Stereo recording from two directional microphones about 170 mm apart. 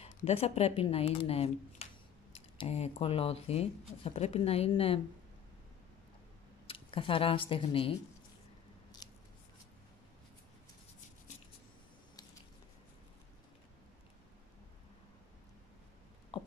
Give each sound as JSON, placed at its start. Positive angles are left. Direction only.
{"t": 0.0, "sound": "speech", "side_deg": 35}
{"t": 6.7, "sound": "speech", "side_deg": 30}
{"t": 9.0, "sound": "scissors", "side_deg": 25}
{"t": 16.3, "sound": "a sound", "side_deg": 30}